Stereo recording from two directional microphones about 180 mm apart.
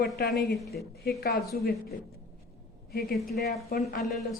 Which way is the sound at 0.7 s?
60° left (ahead or behind).